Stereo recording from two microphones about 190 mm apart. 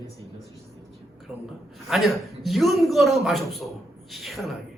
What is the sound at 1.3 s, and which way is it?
A man's voice, 5° right (ahead or behind).